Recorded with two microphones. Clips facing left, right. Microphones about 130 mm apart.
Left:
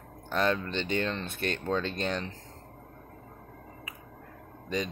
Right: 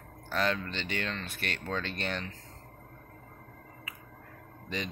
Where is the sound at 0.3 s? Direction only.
25° left (ahead or behind).